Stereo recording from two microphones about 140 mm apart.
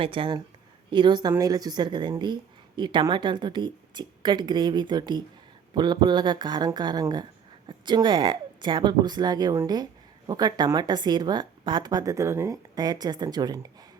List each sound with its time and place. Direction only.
0.0 s a woman's voice: 40° right (ahead or behind)